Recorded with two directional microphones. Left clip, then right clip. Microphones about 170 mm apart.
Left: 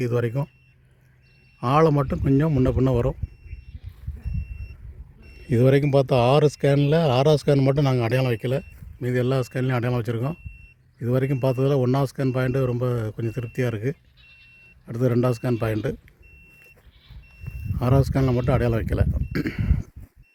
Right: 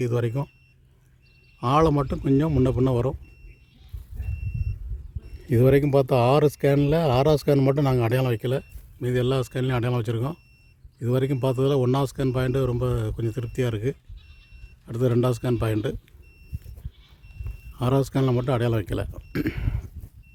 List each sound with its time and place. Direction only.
0.0 s speech: 5° left (ahead or behind)
1.5 s speech: 5° left (ahead or behind)
5.4 s a man's voice: centre (ahead or behind)
17.7 s a man's voice: 5° left (ahead or behind)